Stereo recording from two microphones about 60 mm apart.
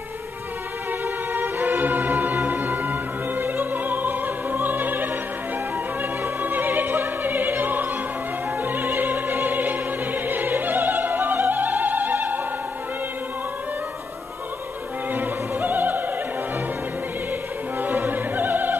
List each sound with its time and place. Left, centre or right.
1.3 s music: right
6.2 s music: right
8.5 s opera: right
15.1 s music: right
17.7 s opera: right